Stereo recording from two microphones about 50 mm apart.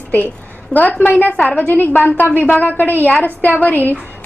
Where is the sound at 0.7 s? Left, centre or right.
Left.